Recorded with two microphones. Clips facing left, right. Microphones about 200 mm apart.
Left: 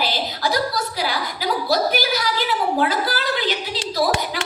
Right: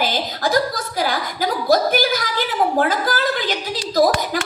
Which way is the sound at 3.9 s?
45° right (ahead or behind).